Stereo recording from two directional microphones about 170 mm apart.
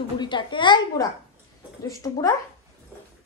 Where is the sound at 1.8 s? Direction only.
60° left (ahead or behind).